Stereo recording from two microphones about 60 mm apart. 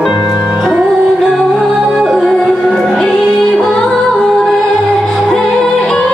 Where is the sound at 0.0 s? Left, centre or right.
Centre.